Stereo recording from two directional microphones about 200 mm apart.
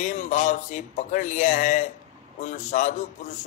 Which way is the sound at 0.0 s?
35° left (ahead or behind).